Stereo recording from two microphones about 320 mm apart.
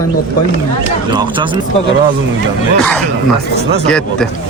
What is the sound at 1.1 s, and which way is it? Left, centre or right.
Speech, centre.